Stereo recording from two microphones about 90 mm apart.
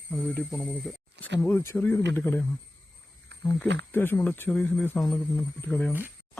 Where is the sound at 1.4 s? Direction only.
25° left (ahead or behind).